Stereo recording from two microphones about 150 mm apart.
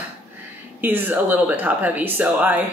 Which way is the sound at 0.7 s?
15° right (ahead or behind).